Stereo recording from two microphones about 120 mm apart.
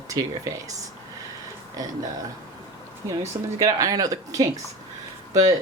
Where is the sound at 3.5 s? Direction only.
30° right (ahead or behind).